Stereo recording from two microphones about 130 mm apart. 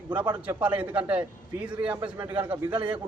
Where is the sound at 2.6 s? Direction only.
40° right (ahead or behind).